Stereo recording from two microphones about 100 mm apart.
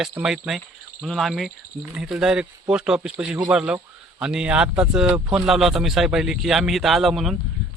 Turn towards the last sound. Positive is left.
turn(degrees=0)  # may be behind; listen again after turning